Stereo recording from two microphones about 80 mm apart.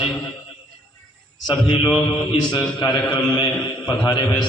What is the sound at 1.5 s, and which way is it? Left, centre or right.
A man's voice, left.